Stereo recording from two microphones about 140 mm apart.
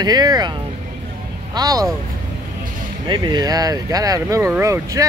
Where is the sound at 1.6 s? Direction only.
25° right (ahead or behind).